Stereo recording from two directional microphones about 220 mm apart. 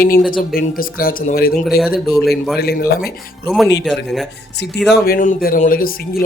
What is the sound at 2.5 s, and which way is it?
Speech, 45° left (ahead or behind).